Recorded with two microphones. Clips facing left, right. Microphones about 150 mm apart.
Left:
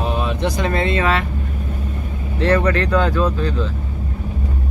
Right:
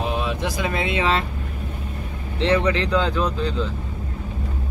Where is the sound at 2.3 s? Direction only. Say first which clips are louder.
Left 3 dB; 15° right (ahead or behind).